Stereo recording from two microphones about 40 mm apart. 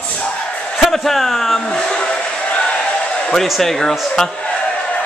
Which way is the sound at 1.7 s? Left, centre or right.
Left.